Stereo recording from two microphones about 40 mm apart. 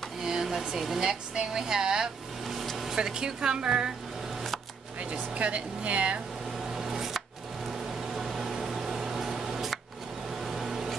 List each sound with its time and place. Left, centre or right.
0.2 s speech: centre
2.4 s a sound: centre
3.0 s a woman's voice: centre
5.1 s speech: right
6.7 s a sound: centre
8.1 s microwave oven: centre
10.4 s vehicle: centre